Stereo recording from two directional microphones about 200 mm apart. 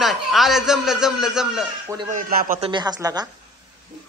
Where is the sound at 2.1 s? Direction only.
40° right (ahead or behind).